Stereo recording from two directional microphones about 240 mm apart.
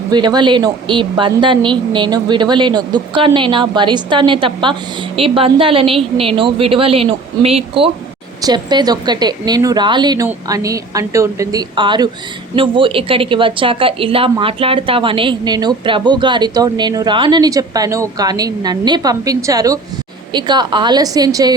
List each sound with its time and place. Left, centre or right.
0.1 s a woman's voice: centre